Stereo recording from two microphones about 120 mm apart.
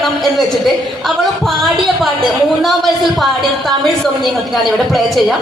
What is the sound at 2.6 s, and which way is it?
A woman's voice, centre (ahead or behind).